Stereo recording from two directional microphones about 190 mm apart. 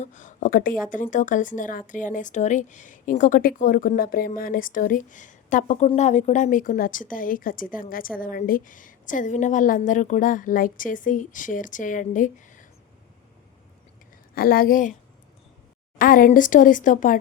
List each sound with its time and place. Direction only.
0.0 s speech: 40° left (ahead or behind)
14.3 s speech: 50° left (ahead or behind)
16.0 s speech: 45° left (ahead or behind)